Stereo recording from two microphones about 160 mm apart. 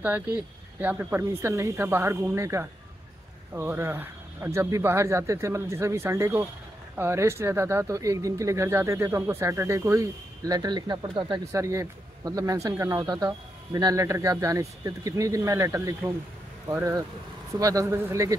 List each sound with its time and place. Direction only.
0.0 s speech: 10° right (ahead or behind)